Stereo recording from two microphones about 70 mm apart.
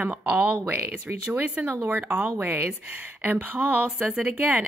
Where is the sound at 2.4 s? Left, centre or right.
Right.